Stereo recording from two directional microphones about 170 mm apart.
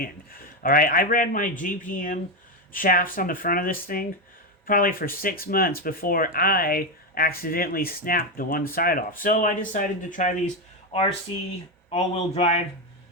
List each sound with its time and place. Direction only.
0.0 s speech: 60° left (ahead or behind)
11.3 s speech: 30° left (ahead or behind)